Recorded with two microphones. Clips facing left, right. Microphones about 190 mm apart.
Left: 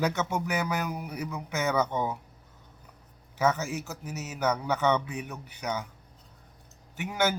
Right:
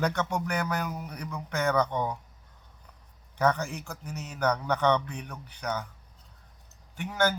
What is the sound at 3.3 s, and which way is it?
Speech, 5° left (ahead or behind).